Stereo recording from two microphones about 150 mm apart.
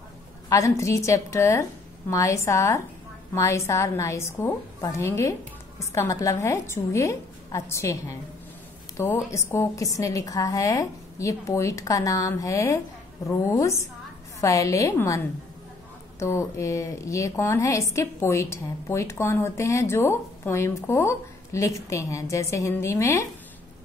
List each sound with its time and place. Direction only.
0.5 s a woman's voice: 20° left (ahead or behind)